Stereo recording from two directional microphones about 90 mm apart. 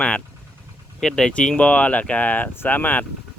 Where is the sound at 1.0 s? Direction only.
5° left (ahead or behind).